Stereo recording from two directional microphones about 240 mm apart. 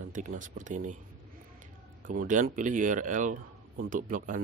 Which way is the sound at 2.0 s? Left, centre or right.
Right.